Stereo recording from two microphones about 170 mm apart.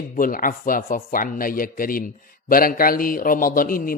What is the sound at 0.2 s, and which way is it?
A man's voice, 55° left (ahead or behind).